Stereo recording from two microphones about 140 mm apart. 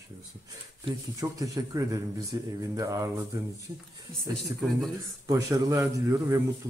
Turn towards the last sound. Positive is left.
turn(degrees=-25)  # may be behind; listen again after turning